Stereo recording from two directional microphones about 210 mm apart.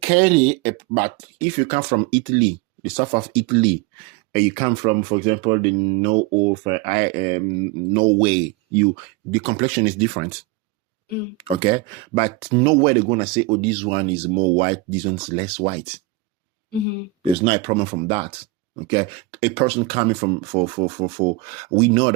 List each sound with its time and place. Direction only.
0.2 s speech: 35° right (ahead or behind)
11.3 s speech: 30° right (ahead or behind)
17.5 s speech: 25° right (ahead or behind)